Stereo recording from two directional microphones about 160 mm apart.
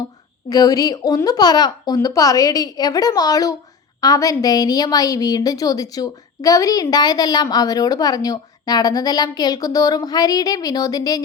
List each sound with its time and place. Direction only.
0.5 s a woman's voice: 20° left (ahead or behind)